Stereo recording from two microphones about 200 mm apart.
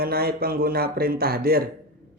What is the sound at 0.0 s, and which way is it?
Speech, 50° right (ahead or behind).